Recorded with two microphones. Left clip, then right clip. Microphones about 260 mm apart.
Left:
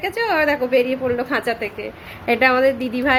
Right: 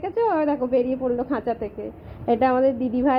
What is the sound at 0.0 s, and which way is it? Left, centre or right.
A woman's voice, centre.